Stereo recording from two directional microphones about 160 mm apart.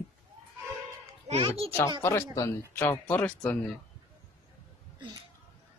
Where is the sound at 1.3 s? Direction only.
35° right (ahead or behind).